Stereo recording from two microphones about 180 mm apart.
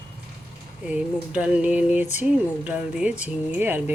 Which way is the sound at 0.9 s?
5° right (ahead or behind).